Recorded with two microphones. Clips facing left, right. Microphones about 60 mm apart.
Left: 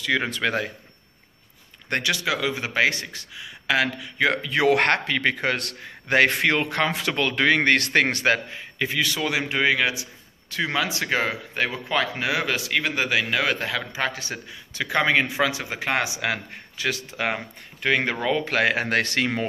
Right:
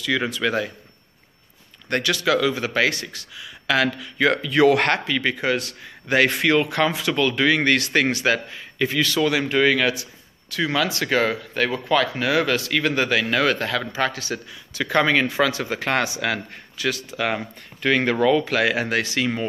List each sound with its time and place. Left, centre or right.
0.0 s speech: left
1.9 s a man's voice: left
6.1 s speech: left
8.5 s a man's voice: centre
14.8 s speech: centre
18.4 s speech: left